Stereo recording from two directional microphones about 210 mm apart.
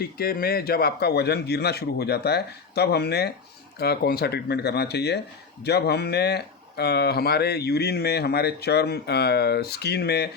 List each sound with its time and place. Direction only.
0.0 s speech: 45° left (ahead or behind)